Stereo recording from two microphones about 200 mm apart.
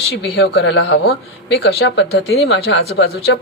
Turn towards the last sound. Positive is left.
turn(degrees=55)  # may be behind; listen again after turning